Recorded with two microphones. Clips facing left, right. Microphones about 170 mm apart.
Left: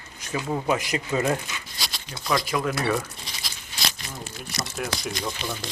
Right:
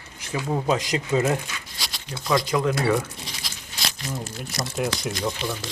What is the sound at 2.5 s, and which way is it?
Speech, 20° right (ahead or behind).